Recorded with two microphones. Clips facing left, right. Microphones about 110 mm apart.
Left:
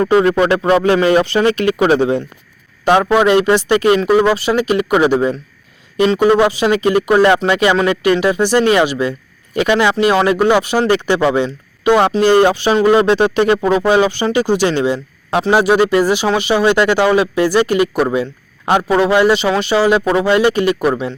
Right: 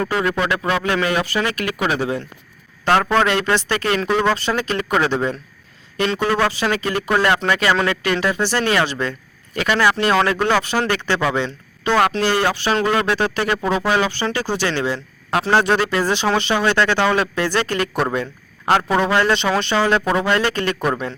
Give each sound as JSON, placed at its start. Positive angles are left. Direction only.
{"t": 0.0, "sound": "speech", "side_deg": 25}